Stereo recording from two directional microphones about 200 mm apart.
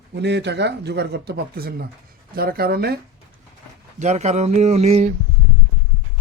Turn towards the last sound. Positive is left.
turn(degrees=-35)  # may be behind; listen again after turning